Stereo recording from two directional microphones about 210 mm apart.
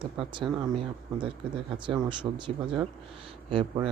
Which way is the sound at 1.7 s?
20° right (ahead or behind).